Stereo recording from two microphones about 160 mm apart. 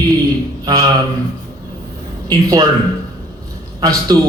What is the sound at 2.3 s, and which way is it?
Music, 25° right (ahead or behind).